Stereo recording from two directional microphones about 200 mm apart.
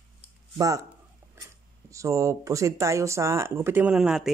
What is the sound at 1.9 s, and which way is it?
Speech, 15° right (ahead or behind).